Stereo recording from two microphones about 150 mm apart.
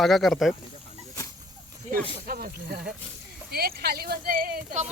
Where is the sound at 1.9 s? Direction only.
75° right (ahead or behind).